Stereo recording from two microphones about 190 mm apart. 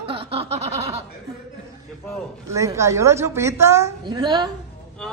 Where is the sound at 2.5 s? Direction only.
15° right (ahead or behind).